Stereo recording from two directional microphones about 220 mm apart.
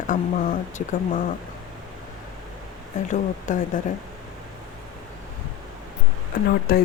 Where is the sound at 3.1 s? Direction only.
35° left (ahead or behind).